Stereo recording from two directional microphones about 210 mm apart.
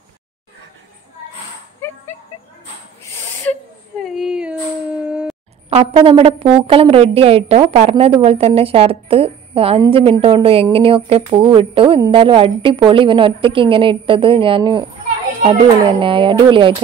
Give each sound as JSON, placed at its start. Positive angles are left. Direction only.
{"t": 4.0, "sound": "a sound", "side_deg": 0}
{"t": 5.7, "sound": "a woman's voice", "side_deg": -30}
{"t": 16.0, "sound": "a woman's voice", "side_deg": -25}